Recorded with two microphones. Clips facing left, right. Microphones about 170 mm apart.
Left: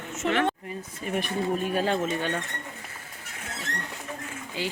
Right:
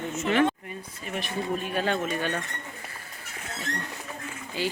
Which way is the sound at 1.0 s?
45° left (ahead or behind).